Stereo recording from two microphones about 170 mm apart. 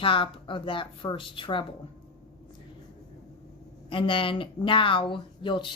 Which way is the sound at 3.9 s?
30° left (ahead or behind).